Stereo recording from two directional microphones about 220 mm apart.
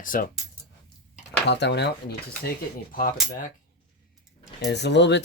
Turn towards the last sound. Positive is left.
turn(degrees=50)  # may be behind; listen again after turning